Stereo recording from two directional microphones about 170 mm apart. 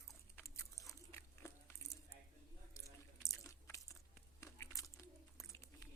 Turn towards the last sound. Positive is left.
turn(degrees=20)  # may be behind; listen again after turning